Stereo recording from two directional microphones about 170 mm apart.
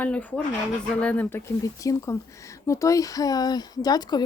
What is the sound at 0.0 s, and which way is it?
Speech, 10° left (ahead or behind).